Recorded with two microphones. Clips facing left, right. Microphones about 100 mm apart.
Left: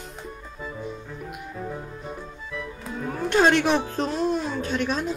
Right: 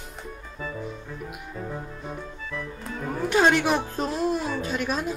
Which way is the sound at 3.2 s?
5° right (ahead or behind).